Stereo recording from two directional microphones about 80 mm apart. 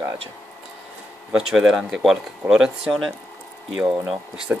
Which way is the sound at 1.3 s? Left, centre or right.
Centre.